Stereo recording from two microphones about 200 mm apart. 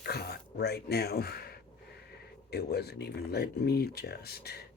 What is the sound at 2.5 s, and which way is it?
Speech, 55° left (ahead or behind).